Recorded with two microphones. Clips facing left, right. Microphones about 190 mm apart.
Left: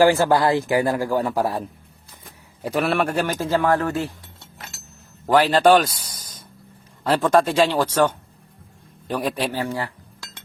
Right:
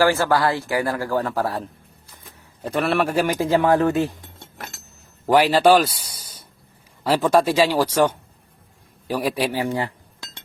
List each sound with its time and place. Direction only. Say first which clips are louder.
0.0 s speech: left 2 dB; 20° left (ahead or behind)
2.6 s a man's voice: even; centre (ahead or behind)
3.2 s speech: right 2 dB; 15° right (ahead or behind)